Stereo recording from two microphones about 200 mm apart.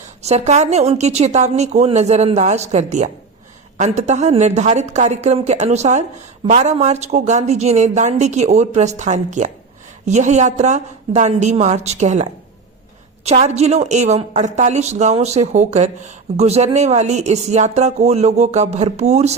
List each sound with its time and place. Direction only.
0.2 s a woman's voice: 35° right (ahead or behind)